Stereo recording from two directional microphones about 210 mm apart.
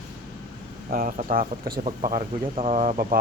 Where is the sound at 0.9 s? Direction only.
40° right (ahead or behind).